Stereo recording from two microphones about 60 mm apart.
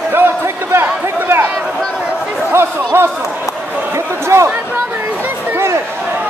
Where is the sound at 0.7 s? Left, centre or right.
Right.